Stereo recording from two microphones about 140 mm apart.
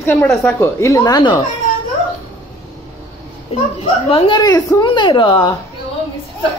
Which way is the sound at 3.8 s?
40° left (ahead or behind).